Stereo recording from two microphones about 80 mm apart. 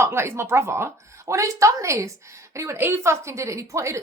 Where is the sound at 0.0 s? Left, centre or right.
Right.